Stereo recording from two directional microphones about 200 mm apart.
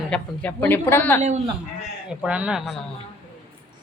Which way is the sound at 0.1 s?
10° left (ahead or behind).